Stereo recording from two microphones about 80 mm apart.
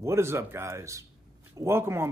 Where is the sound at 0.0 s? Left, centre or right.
Right.